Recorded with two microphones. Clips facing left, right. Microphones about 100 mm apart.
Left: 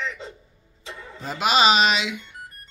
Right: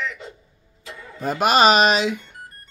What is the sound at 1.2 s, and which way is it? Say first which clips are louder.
Speech: right 4 dB; 50° right (ahead or behind).